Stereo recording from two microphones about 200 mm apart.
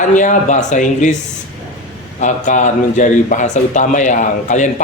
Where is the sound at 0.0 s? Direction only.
40° left (ahead or behind).